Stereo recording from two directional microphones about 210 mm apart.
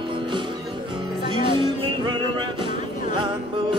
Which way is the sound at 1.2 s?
25° right (ahead or behind).